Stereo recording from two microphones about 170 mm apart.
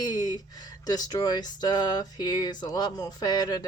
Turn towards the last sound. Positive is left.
turn(degrees=25)  # may be behind; listen again after turning